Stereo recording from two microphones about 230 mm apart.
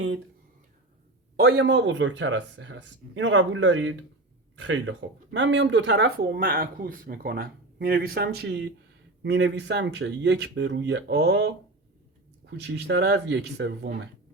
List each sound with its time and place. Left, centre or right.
1.4 s speech: right